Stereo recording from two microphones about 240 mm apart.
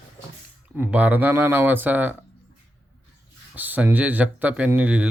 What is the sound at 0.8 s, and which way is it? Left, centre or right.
Speech, centre.